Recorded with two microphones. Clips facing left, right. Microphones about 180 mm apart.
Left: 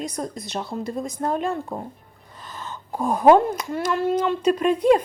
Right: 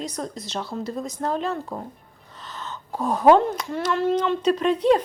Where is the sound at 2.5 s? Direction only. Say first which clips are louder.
Even; 10° left (ahead or behind).